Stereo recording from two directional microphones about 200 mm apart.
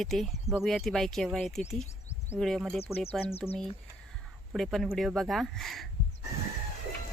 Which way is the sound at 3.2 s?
30° left (ahead or behind).